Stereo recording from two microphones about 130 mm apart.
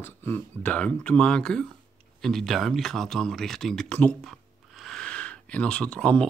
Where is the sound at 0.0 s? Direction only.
15° left (ahead or behind).